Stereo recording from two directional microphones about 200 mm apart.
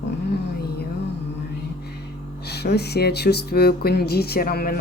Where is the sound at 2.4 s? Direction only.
55° left (ahead or behind).